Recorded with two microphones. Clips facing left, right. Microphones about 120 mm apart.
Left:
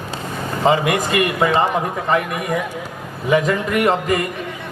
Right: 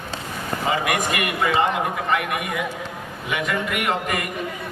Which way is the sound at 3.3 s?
35° left (ahead or behind).